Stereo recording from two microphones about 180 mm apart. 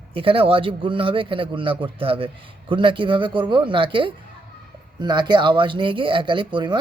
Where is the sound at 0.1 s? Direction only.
30° right (ahead or behind).